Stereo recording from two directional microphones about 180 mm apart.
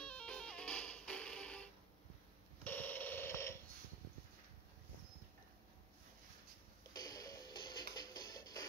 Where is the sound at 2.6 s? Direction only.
10° left (ahead or behind).